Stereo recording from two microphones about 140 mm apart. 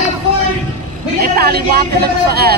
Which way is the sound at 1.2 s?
90° right.